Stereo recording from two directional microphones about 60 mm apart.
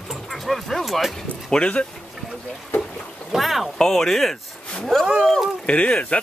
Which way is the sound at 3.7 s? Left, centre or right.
Centre.